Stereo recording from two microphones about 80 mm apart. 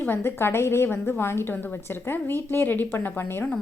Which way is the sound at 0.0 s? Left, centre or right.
Left.